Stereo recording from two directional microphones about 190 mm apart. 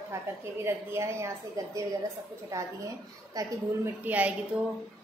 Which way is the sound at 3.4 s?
20° right (ahead or behind).